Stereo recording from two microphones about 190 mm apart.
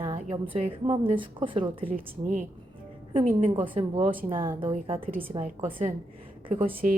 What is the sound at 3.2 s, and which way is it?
Speech, 40° right (ahead or behind).